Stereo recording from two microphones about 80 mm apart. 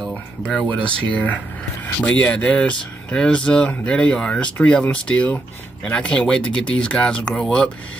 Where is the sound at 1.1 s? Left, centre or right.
Left.